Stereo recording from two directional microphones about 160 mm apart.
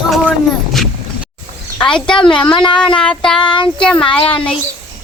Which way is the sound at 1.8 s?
5° left (ahead or behind).